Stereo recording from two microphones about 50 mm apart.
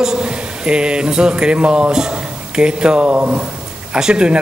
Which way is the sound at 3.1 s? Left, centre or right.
Right.